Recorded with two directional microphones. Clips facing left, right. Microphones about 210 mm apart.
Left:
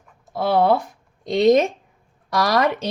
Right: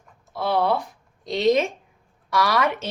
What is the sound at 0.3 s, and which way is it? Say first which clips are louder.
A woman's voice: left 4 dB; 50° left (ahead or behind).